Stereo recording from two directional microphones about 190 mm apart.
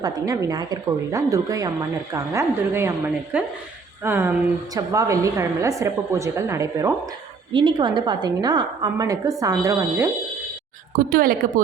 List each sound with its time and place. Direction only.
0.0 s a woman's voice: 20° right (ahead or behind)
7.5 s a woman's voice: 25° right (ahead or behind)
10.9 s a woman's voice: 50° right (ahead or behind)